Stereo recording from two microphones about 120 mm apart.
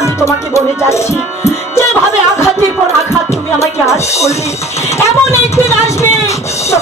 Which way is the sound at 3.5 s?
25° left (ahead or behind).